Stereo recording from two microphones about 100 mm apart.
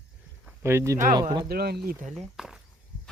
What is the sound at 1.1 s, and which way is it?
Speech, 45° right (ahead or behind).